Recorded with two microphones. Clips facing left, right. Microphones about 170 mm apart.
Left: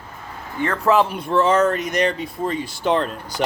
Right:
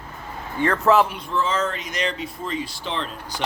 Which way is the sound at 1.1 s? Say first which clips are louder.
Left 7 dB; 55° left (ahead or behind).